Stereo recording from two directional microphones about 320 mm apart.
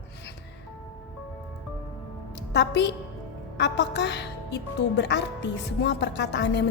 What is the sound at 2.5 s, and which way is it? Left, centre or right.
A woman's voice, left.